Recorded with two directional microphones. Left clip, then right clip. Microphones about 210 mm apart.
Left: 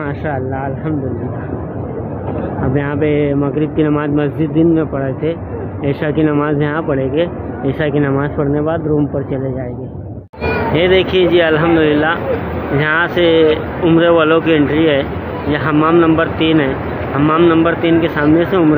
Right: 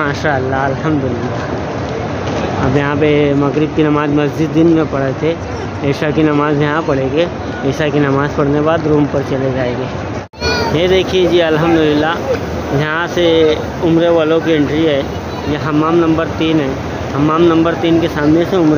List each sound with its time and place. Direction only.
0.0 s speech: 15° right (ahead or behind)
2.7 s speech: 15° right (ahead or behind)
10.7 s speech: 15° right (ahead or behind)